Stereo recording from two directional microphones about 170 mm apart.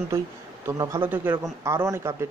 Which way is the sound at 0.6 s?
15° right (ahead or behind).